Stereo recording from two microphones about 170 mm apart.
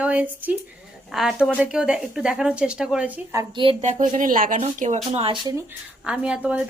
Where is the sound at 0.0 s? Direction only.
10° right (ahead or behind).